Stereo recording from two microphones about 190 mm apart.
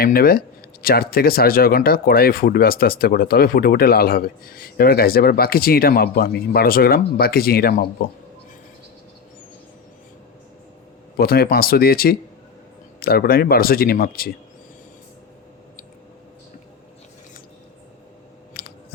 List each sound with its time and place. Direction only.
0.0 s speech: 50° left (ahead or behind)
11.2 s speech: 50° left (ahead or behind)
18.5 s a sound: 55° left (ahead or behind)